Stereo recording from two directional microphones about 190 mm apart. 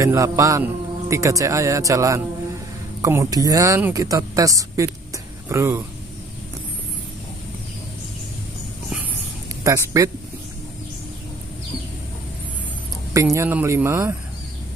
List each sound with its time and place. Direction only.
0.0 s a man's voice: 15° right (ahead or behind)
9.6 s speech: 15° right (ahead or behind)
13.1 s a man's voice: 15° right (ahead or behind)